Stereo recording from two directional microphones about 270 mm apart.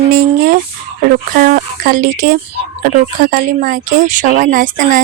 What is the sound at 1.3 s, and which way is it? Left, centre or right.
Speech, right.